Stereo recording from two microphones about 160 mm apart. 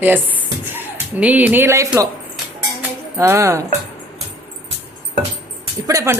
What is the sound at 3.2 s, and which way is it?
Speech, 20° right (ahead or behind).